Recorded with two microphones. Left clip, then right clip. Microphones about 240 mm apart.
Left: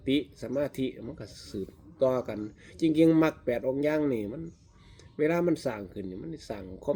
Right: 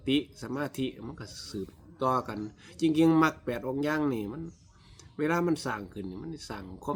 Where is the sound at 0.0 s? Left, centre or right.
Centre.